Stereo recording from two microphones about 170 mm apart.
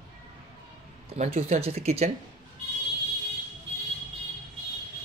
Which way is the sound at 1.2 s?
40° right (ahead or behind).